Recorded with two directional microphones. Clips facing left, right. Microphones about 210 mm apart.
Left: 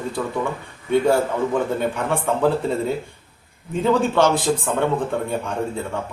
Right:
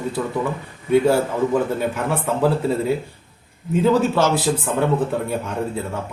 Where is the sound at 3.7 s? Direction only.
5° right (ahead or behind).